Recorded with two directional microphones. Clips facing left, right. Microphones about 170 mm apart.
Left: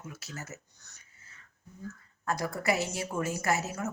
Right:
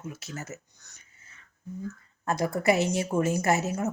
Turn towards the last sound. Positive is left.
turn(degrees=-20)  # may be behind; listen again after turning